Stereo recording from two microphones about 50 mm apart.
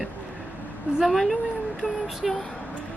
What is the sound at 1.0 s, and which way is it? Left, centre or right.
A woman's voice, centre.